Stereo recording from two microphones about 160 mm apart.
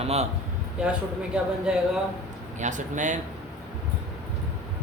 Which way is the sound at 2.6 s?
50° right (ahead or behind).